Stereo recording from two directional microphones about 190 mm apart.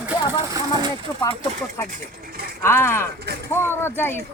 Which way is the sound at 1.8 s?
50° right (ahead or behind).